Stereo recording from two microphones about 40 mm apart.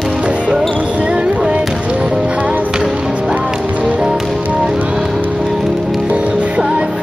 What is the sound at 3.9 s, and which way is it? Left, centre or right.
Music, centre.